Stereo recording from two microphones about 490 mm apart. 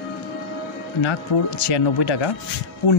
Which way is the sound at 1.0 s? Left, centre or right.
Left.